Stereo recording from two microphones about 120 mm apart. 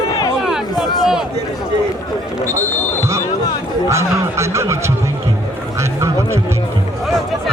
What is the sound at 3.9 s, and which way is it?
Speech, 25° right (ahead or behind).